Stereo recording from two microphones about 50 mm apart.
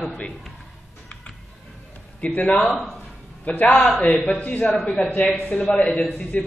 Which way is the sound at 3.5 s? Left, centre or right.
Left.